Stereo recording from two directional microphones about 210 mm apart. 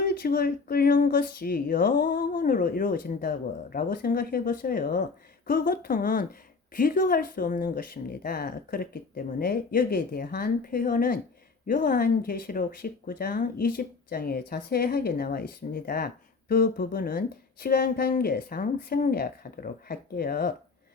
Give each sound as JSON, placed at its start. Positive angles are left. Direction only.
{"t": 0.0, "sound": "speech", "side_deg": 45}